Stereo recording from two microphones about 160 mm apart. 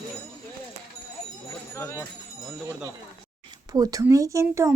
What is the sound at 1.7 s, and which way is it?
Speech, 20° left (ahead or behind).